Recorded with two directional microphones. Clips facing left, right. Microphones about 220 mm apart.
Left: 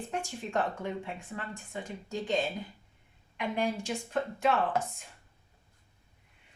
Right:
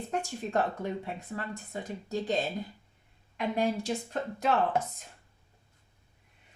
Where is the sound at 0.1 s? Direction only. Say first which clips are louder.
Right 4 dB; 40° right (ahead or behind).